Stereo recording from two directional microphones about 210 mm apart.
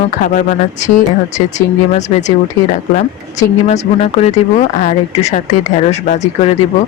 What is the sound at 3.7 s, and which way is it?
Speech, 30° left (ahead or behind).